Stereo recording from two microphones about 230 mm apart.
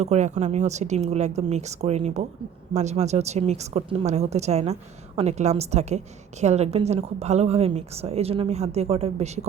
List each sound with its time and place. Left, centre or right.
0.0 s a woman's voice: right